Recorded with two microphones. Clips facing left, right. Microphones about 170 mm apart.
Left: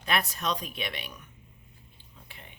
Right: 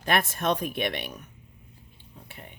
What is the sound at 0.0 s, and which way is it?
Speech, 50° right (ahead or behind).